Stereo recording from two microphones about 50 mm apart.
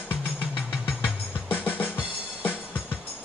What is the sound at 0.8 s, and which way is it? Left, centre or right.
Music, left.